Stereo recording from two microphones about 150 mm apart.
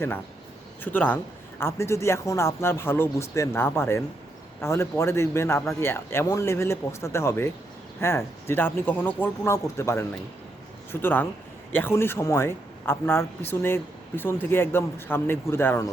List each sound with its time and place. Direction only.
0.9 s speech: 10° left (ahead or behind)